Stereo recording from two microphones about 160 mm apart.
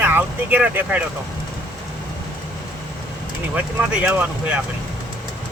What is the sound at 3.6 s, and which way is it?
Speech, 10° right (ahead or behind).